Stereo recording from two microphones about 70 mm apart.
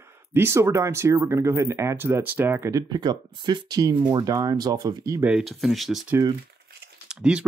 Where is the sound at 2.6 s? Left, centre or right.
Right.